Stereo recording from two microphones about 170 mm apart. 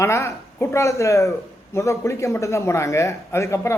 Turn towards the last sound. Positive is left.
turn(degrees=15)  # may be behind; listen again after turning